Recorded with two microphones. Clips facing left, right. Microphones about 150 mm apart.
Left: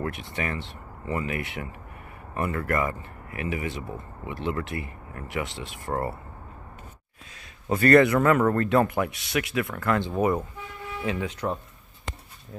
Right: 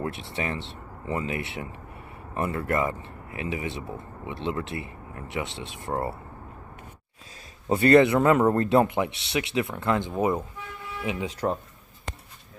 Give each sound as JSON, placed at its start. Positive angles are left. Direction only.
{"t": 0.0, "sound": "speech", "side_deg": -25}
{"t": 7.7, "sound": "speech", "side_deg": -25}
{"t": 11.4, "sound": "speech", "side_deg": -35}